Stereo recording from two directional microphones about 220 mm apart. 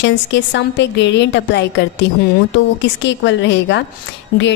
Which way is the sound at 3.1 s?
55° left (ahead or behind).